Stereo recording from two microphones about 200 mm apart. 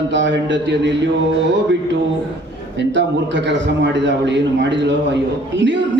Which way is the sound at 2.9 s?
65° right (ahead or behind).